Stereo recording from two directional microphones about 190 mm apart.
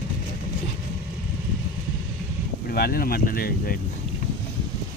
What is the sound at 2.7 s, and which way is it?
Speech, 50° left (ahead or behind).